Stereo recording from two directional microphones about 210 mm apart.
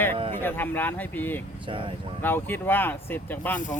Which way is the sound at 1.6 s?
25° right (ahead or behind).